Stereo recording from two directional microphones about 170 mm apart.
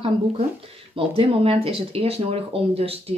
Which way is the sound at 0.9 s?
35° right (ahead or behind).